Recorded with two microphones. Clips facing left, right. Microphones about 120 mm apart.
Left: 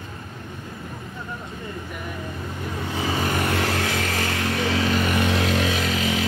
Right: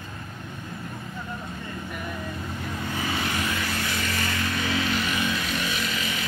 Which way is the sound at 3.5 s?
75° left (ahead or behind).